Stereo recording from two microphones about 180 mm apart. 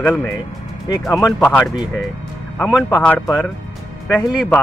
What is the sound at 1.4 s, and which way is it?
Speech, 10° left (ahead or behind).